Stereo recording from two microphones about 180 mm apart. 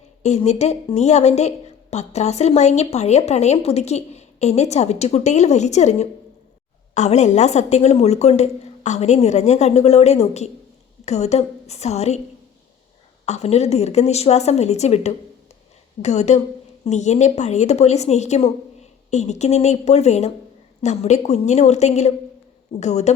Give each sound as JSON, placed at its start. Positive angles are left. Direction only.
{"t": 0.2, "sound": "a woman's voice", "side_deg": 40}
{"t": 13.2, "sound": "a woman's voice", "side_deg": 35}